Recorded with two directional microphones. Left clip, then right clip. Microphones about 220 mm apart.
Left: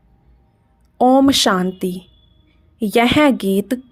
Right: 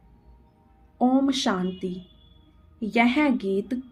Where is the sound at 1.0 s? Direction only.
50° left (ahead or behind).